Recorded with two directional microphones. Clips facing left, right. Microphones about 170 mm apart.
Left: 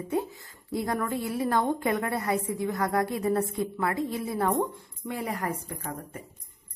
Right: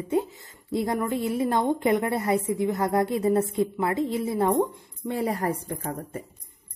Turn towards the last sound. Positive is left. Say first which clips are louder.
# right 5 dB
turn(degrees=-35)  # may be behind; listen again after turning